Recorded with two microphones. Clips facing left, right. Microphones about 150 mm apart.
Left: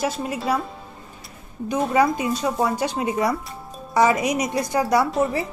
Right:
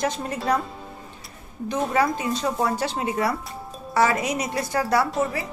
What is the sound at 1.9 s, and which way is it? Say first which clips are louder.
A woman's voice: left 4 dB; 15° left (ahead or behind).